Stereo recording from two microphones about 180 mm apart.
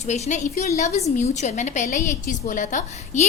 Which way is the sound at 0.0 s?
40° left (ahead or behind).